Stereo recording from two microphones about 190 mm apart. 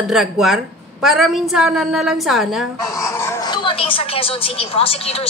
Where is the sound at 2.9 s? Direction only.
15° left (ahead or behind).